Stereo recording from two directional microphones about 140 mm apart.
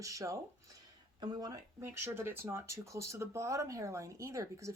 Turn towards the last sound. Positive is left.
turn(degrees=-20)  # may be behind; listen again after turning